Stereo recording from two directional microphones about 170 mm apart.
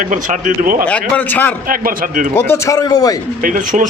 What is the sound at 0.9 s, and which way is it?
Speech, 5° left (ahead or behind).